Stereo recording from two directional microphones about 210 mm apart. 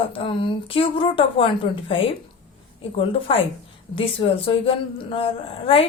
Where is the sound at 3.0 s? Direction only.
25° left (ahead or behind).